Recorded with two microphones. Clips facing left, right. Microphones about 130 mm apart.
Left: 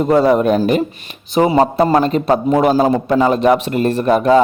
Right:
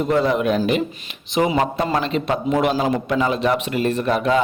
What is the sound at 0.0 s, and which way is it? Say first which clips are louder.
A man's voice: left 6 dB; 40° left (ahead or behind).